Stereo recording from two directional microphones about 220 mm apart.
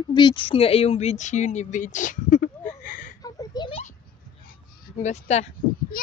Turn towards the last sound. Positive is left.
turn(degrees=30)  # may be behind; listen again after turning